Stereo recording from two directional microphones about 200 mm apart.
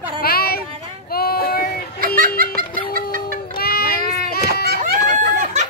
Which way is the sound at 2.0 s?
45° right (ahead or behind).